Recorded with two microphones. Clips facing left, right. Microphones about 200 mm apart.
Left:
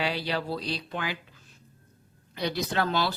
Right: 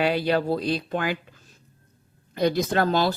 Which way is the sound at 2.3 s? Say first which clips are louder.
Right 7 dB; 45° right (ahead or behind).